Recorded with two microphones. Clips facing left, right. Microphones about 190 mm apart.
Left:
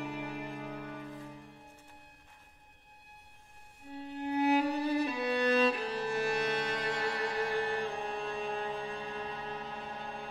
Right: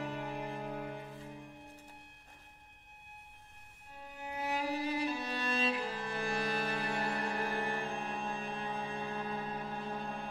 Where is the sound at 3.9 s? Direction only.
70° left (ahead or behind); by 7.3 s 90° left.